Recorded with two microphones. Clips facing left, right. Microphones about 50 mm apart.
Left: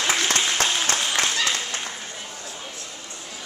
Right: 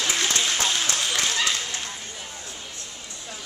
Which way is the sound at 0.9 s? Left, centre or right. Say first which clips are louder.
Left 2 dB; left.